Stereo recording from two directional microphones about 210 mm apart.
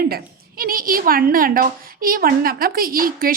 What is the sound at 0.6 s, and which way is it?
A woman's voice, 45° right (ahead or behind).